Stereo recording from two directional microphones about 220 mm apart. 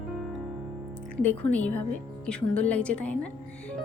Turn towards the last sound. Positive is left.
turn(degrees=5)  # may be behind; listen again after turning